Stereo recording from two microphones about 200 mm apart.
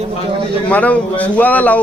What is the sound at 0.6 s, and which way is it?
Speech, 5° left (ahead or behind).